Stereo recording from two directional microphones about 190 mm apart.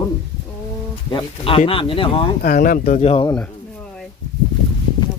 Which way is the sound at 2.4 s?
50° left (ahead or behind).